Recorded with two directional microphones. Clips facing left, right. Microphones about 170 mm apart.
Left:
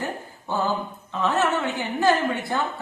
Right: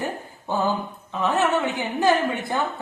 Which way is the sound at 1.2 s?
15° right (ahead or behind).